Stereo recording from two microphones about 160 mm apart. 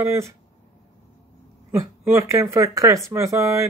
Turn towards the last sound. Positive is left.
turn(degrees=-20)  # may be behind; listen again after turning